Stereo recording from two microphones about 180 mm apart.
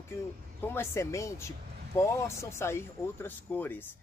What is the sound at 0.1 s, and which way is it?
Speech, 10° left (ahead or behind).